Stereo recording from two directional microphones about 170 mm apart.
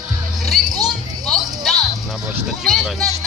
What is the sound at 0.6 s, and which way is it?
Music, 25° right (ahead or behind).